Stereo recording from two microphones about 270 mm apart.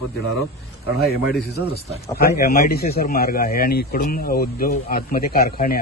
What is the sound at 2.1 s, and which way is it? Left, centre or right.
Speech, left.